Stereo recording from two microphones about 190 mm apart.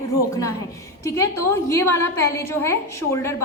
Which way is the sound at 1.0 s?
15° left (ahead or behind).